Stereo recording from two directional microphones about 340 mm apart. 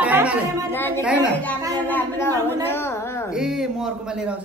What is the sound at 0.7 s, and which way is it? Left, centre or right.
A woman's voice, centre.